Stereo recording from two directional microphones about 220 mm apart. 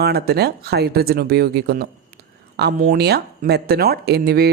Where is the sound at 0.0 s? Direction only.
45° right (ahead or behind).